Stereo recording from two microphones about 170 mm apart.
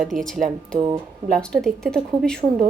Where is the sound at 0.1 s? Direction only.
5° left (ahead or behind).